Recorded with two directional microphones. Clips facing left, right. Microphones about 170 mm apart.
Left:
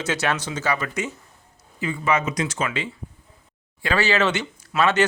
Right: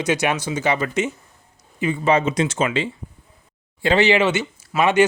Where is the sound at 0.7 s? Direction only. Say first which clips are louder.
Right 5 dB; 25° right (ahead or behind).